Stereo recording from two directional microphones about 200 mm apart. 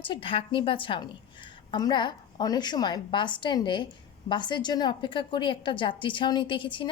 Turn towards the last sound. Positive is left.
turn(degrees=25)  # may be behind; listen again after turning